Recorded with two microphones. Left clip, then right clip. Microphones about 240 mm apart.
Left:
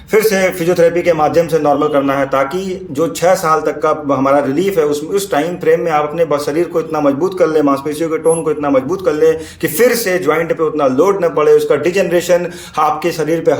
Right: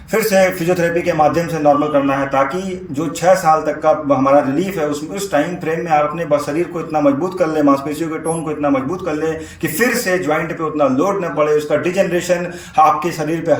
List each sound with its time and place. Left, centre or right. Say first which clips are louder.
0.1 s a man's voice: left 2 dB; centre
3.0 s a man's voice: left 1 dB; left